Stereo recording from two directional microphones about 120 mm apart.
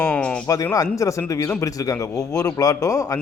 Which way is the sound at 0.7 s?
30° left (ahead or behind).